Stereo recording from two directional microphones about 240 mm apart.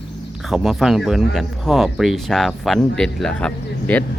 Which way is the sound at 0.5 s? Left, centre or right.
Centre.